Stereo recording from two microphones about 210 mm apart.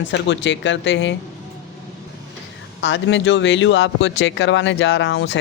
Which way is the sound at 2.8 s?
60° left (ahead or behind).